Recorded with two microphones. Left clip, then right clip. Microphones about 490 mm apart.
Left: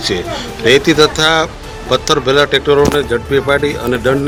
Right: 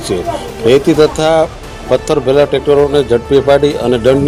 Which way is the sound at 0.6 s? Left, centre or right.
Left.